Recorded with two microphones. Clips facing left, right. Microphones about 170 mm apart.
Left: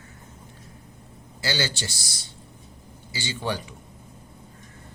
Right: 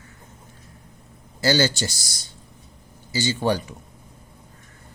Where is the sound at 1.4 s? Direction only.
45° right (ahead or behind).